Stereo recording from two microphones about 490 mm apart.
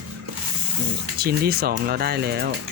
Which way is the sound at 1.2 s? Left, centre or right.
Centre.